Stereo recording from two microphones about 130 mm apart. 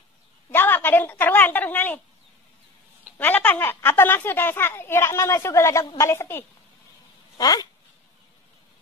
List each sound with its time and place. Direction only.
0.5 s a woman's voice: 15° left (ahead or behind)
3.2 s a child's voice: 15° left (ahead or behind); by 7.6 s 30° left (ahead or behind)